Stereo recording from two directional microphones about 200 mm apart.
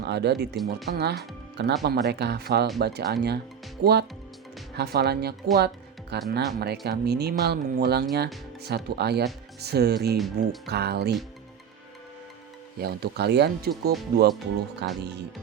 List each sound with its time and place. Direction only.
0.0 s speech: 55° right (ahead or behind)
0.3 s speech: centre (ahead or behind)
0.9 s speech: 55° right (ahead or behind)
5.5 s music: 55° right (ahead or behind)
6.3 s speech: 55° right (ahead or behind)
10.2 s speech: centre (ahead or behind)
10.7 s speech: 55° right (ahead or behind)
12.8 s speech: 55° right (ahead or behind)